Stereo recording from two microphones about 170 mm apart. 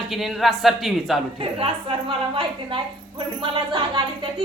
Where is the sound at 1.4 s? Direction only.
30° right (ahead or behind).